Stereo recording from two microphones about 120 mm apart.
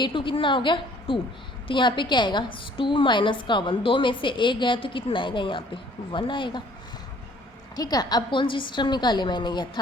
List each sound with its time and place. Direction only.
0.0 s a woman's voice: 45° left (ahead or behind)
7.8 s a woman's voice: 30° left (ahead or behind)